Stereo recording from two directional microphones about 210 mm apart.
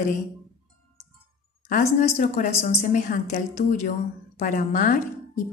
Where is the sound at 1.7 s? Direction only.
35° left (ahead or behind).